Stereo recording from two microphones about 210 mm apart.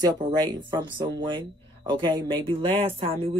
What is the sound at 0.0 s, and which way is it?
A woman's voice, 20° right (ahead or behind).